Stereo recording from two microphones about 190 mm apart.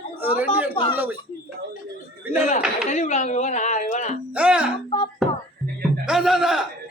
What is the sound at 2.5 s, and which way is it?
Speech, 40° left (ahead or behind).